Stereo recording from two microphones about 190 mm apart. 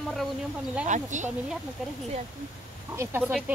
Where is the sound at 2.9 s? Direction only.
10° right (ahead or behind).